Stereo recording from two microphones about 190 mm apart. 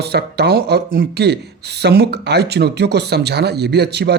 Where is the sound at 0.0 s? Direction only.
60° right (ahead or behind).